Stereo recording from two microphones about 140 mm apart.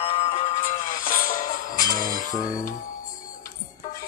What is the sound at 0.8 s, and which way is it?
Music, 80° left.